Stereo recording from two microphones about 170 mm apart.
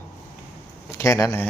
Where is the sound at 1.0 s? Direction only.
15° left (ahead or behind).